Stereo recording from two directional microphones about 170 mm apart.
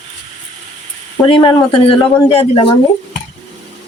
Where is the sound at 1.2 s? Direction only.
30° left (ahead or behind).